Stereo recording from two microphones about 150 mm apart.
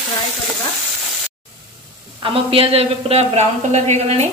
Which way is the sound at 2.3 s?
40° right (ahead or behind).